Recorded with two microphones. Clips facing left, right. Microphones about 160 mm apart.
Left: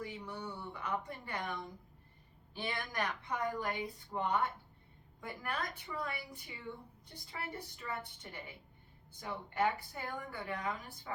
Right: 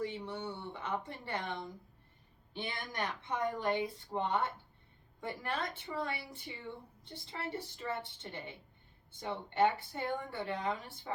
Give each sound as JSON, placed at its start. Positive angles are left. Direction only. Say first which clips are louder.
{"t": 0.0, "sound": "a woman's voice", "louder": "right 4 dB", "side_deg": -25}